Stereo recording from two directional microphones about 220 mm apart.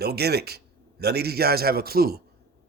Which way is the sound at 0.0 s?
45° right (ahead or behind).